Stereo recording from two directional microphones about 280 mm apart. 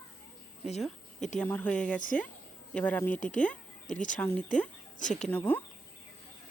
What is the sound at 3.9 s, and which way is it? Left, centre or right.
Speech, left.